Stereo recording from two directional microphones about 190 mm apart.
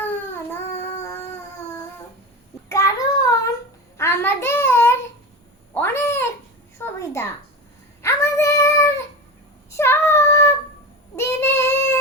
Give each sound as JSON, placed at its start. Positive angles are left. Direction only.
{"t": 2.6, "sound": "a sound", "side_deg": 15}
{"t": 3.9, "sound": "child singing", "side_deg": 15}
{"t": 5.7, "sound": "cat", "side_deg": 15}
{"t": 6.7, "sound": "a sound", "side_deg": 15}
{"t": 8.0, "sound": "female singing", "side_deg": 15}
{"t": 9.7, "sound": "child singing", "side_deg": 15}